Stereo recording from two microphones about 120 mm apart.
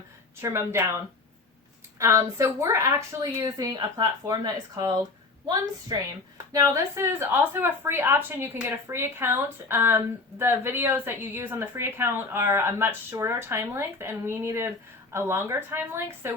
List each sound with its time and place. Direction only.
0.4 s a woman's voice: 20° right (ahead or behind)
2.0 s a woman's voice: 25° right (ahead or behind)